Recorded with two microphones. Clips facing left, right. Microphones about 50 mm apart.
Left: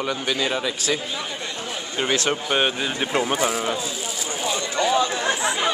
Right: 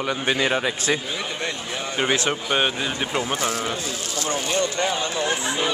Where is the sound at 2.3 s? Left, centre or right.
Centre.